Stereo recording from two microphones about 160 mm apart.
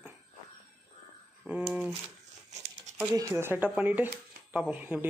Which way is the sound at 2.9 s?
15° right (ahead or behind).